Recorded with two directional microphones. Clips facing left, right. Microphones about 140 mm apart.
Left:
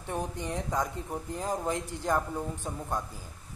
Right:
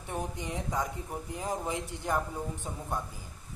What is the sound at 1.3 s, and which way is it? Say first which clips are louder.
Speech: left 2 dB; 15° right (ahead or behind).